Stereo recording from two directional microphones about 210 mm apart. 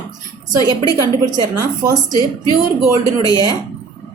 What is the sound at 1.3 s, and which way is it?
Speech, 15° right (ahead or behind).